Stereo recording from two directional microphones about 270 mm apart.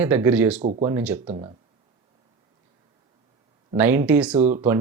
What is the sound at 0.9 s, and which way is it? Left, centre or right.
Speech, centre.